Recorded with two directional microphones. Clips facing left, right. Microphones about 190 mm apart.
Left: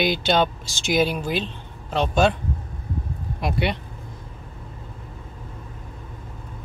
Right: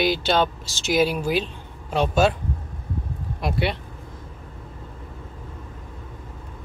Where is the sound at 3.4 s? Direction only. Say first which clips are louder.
Even; centre (ahead or behind).